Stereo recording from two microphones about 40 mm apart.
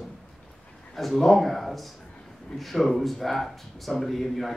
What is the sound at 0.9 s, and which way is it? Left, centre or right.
A man's voice, centre.